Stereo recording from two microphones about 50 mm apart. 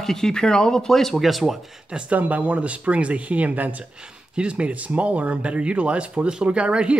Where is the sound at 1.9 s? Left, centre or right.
Centre.